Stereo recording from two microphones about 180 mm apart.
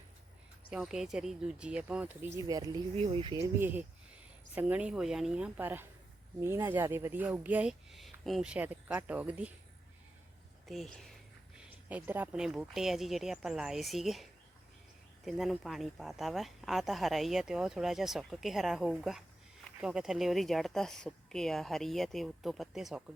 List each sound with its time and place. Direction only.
0.7 s speech: 5° right (ahead or behind); by 2.8 s 20° right (ahead or behind)
2.9 s speech: 35° right (ahead or behind)
3.3 s speech: 15° right (ahead or behind)
10.7 s speech: centre (ahead or behind)